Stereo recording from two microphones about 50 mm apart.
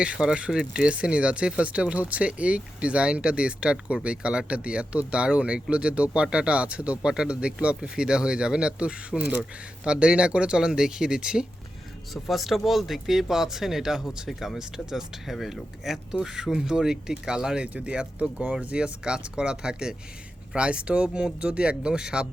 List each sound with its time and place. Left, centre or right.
0.0 s speech: right
12.1 s speech: centre